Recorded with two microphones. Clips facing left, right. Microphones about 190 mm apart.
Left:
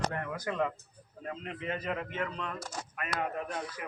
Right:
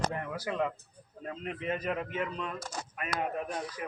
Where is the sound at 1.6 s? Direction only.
15° right (ahead or behind).